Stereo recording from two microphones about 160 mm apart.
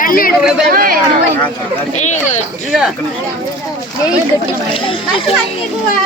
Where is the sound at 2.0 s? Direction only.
45° left (ahead or behind).